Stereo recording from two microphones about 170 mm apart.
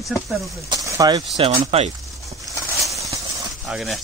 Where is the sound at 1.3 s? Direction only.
35° right (ahead or behind).